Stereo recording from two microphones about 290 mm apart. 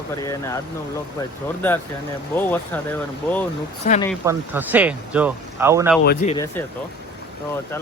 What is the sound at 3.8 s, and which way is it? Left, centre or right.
Speech, left.